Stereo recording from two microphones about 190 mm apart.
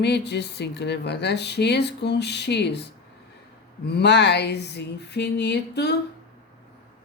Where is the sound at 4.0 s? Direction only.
65° left (ahead or behind).